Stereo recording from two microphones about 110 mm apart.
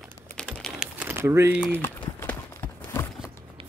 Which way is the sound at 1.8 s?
20° left (ahead or behind).